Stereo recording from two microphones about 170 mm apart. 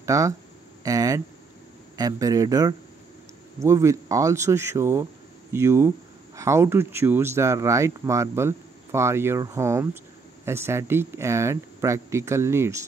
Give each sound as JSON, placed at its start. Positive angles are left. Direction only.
{"t": 0.0, "sound": "speech", "side_deg": -20}